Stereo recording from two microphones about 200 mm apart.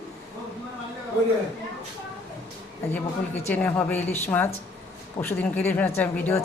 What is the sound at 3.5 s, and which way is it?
Speech, 10° left (ahead or behind).